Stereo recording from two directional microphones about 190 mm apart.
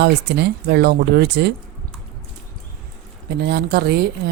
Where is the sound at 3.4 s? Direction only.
60° right (ahead or behind).